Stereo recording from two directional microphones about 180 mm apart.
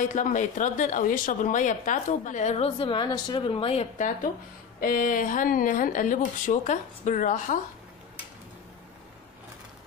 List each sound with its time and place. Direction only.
0.0 s a woman's voice: 45° left (ahead or behind)
4.7 s a woman's voice: 50° left (ahead or behind)